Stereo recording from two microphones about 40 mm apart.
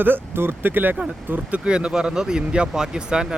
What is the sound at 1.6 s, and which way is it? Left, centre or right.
Speech, right.